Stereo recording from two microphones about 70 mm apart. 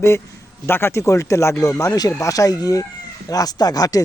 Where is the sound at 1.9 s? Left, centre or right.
Left.